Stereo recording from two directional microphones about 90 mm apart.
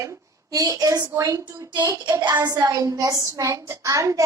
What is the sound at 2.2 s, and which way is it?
A child's voice, 50° right (ahead or behind).